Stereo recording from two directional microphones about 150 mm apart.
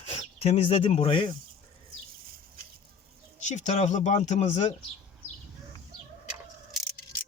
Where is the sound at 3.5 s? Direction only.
50° left (ahead or behind).